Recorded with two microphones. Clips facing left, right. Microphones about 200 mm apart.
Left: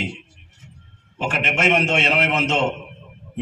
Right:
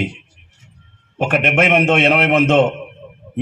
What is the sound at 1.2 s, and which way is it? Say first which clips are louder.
A man's voice: right 6 dB; 60° right (ahead or behind).